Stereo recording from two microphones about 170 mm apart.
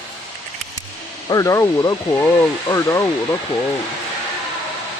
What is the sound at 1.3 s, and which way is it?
Speech, 20° left (ahead or behind).